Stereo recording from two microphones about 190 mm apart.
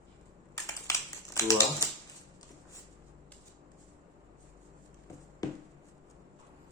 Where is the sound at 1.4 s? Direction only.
15° left (ahead or behind).